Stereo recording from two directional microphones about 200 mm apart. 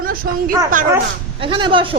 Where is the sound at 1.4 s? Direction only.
25° right (ahead or behind).